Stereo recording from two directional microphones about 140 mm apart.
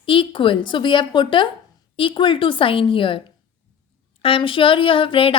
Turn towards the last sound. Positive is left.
turn(degrees=40)  # may be behind; listen again after turning